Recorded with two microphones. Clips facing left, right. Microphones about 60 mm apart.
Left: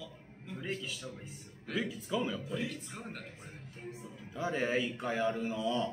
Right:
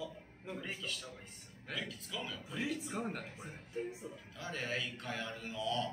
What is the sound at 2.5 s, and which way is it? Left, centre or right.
A man's voice, centre.